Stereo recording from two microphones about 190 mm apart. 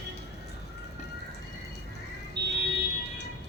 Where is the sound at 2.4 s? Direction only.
60° right (ahead or behind).